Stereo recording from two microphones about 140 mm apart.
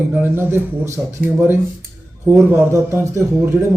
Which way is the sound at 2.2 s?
20° right (ahead or behind).